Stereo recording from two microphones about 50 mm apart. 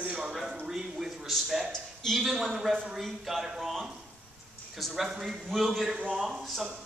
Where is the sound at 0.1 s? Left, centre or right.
Centre.